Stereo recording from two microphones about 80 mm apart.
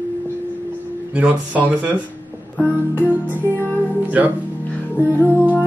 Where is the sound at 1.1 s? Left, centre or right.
Centre.